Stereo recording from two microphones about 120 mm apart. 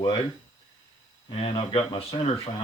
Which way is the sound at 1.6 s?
60° left (ahead or behind).